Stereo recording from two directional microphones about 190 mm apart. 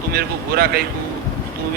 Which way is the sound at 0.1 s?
55° right (ahead or behind).